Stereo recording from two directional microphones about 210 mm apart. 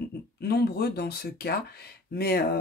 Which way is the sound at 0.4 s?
50° left (ahead or behind).